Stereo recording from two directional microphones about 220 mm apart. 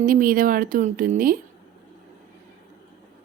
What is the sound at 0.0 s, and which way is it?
Speech, 40° right (ahead or behind).